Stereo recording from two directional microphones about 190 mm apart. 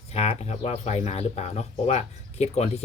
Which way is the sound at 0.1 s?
35° left (ahead or behind).